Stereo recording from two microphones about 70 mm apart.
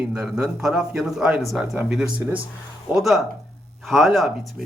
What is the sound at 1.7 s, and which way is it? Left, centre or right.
Speech, centre.